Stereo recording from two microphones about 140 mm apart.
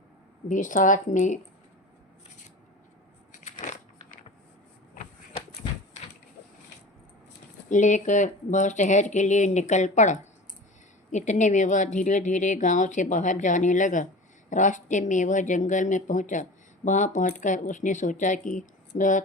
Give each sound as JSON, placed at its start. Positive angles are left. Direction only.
{"t": 0.4, "sound": "speech", "side_deg": 70}
{"t": 3.3, "sound": "crushing", "side_deg": 60}
{"t": 7.7, "sound": "speech", "side_deg": 60}